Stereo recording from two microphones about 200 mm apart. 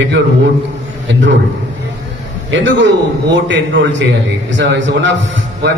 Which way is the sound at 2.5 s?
65° right (ahead or behind).